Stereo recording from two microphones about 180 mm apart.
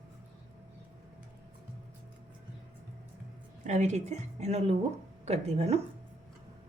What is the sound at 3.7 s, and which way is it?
Speech, 40° right (ahead or behind).